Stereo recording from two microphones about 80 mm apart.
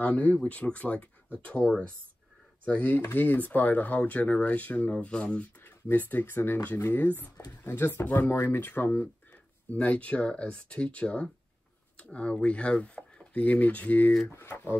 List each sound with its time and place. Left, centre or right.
0.0 s speech: centre
5.6 s speech: left
14.3 s speech: left